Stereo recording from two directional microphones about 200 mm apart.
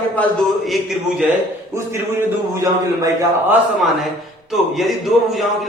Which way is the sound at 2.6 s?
15° right (ahead or behind).